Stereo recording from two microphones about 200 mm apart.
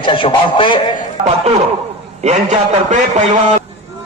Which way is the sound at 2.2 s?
35° right (ahead or behind).